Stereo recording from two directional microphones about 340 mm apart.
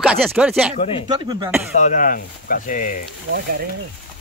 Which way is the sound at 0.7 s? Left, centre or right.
Centre.